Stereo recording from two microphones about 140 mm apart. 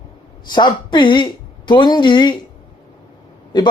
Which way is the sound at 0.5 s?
35° left (ahead or behind).